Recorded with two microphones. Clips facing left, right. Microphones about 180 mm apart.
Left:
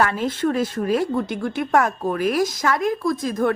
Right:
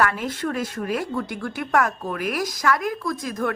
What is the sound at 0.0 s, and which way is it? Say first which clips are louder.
Speech: left 3 dB; 25° left (ahead or behind).